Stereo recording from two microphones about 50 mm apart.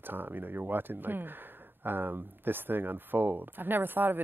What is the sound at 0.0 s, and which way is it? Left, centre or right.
Speech, right.